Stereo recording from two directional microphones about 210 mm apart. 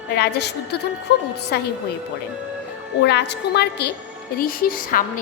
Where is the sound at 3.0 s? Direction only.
55° left (ahead or behind).